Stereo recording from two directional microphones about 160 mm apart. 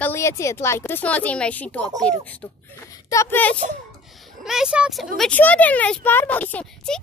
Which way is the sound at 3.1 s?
15° left (ahead or behind).